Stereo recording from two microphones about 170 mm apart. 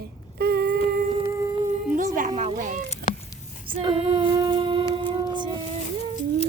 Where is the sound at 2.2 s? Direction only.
45° right (ahead or behind).